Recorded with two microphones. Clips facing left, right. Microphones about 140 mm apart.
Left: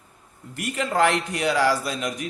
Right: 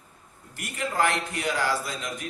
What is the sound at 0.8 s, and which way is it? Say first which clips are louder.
Speech: left 4 dB; 80° left.